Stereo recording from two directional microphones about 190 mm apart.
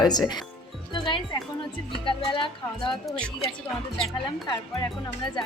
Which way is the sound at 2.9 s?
Centre (ahead or behind).